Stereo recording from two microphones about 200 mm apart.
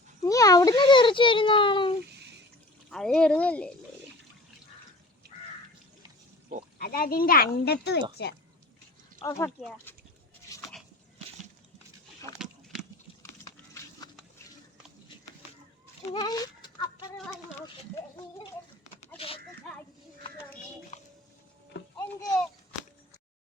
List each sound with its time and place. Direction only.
0.2 s a child's voice: 15° left (ahead or behind)
2.9 s speech: 5° left (ahead or behind)
6.7 s speech: 50° left (ahead or behind)
9.2 s speech: 15° left (ahead or behind)
9.9 s bleat: 10° left (ahead or behind)
13.4 s a sound: 15° left (ahead or behind)
16.1 s chicken: 20° left (ahead or behind)
18.9 s a sound: 30° left (ahead or behind)
20.9 s music: 35° left (ahead or behind)